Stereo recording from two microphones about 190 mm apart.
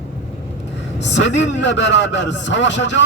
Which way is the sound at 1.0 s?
70° left (ahead or behind).